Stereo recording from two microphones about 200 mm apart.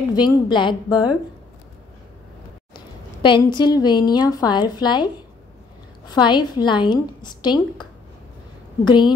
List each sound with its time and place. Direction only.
0.1 s a woman's voice: 20° left (ahead or behind)
2.7 s a woman's voice: 25° left (ahead or behind)
8.8 s a woman's voice: 20° left (ahead or behind)